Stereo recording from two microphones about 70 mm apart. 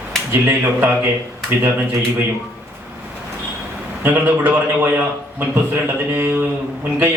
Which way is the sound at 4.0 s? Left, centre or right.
Right.